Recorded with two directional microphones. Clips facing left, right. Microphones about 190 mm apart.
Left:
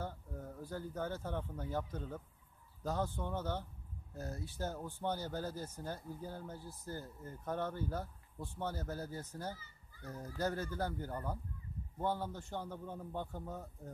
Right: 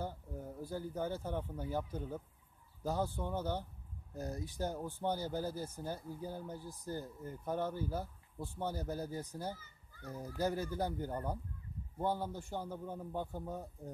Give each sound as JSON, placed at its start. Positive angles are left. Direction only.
{"t": 0.0, "sound": "speech", "side_deg": -10}